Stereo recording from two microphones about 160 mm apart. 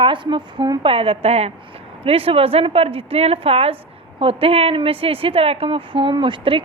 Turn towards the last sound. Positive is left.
turn(degrees=-35)  # may be behind; listen again after turning